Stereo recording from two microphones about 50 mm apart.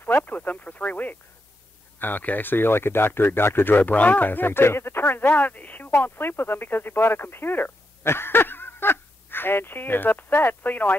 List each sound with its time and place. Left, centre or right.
0.0 s speech: left